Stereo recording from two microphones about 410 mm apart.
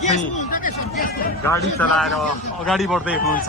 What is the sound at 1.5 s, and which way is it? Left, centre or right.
A man's voice, centre.